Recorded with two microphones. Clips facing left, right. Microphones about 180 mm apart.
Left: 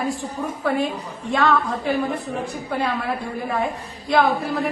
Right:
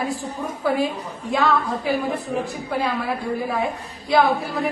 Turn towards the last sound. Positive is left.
turn(degrees=0)  # may be behind; listen again after turning